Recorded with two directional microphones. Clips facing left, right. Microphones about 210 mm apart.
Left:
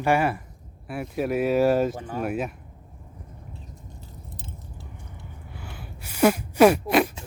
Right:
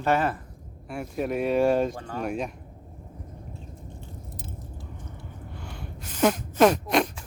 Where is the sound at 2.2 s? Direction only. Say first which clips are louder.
Left 2 dB; 5° left (ahead or behind).